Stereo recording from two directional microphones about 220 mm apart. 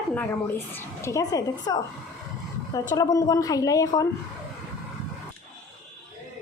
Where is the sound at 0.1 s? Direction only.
10° left (ahead or behind).